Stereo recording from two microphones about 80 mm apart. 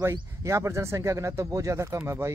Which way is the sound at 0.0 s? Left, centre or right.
Right.